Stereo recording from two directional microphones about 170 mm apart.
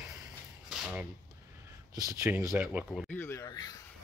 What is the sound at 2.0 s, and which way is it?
Speech, 20° right (ahead or behind).